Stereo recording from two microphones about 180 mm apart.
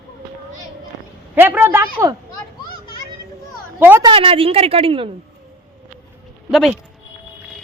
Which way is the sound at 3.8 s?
10° right (ahead or behind).